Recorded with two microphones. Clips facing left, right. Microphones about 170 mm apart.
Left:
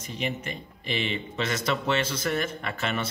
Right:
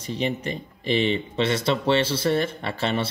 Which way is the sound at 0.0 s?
35° right (ahead or behind).